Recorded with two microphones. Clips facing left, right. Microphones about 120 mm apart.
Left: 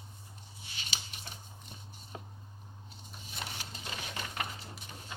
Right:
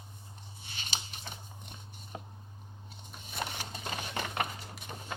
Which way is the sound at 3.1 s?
50° right (ahead or behind).